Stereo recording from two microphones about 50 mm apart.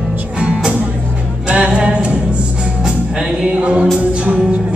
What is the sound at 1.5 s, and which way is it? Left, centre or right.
Music, right.